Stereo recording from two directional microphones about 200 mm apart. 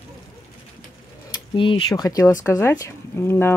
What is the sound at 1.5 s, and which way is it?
Speech, 25° left (ahead or behind).